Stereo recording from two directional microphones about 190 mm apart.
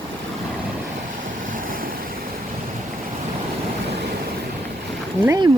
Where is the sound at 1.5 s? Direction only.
45° right (ahead or behind).